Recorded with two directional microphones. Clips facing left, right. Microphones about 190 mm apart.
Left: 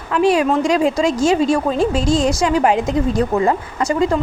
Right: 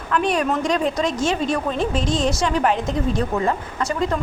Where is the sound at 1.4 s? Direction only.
35° left (ahead or behind).